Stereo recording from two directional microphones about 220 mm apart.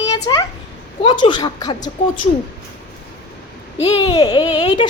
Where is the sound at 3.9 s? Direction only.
20° left (ahead or behind).